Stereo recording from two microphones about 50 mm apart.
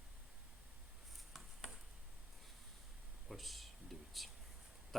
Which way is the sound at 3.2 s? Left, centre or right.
Centre.